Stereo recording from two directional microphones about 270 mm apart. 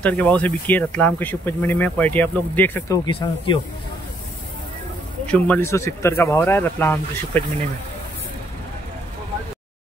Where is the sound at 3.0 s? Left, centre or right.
Centre.